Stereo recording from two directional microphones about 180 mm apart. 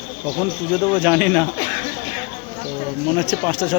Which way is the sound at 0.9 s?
Centre (ahead or behind).